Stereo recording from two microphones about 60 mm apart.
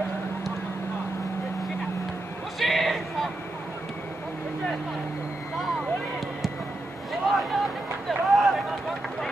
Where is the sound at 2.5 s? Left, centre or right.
Centre.